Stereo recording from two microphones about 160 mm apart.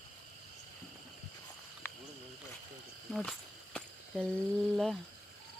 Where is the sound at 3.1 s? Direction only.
5° left (ahead or behind).